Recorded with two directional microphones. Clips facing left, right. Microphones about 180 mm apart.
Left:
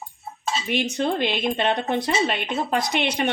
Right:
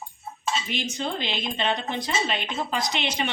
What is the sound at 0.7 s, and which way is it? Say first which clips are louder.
Speech: left 6 dB; 60° left (ahead or behind).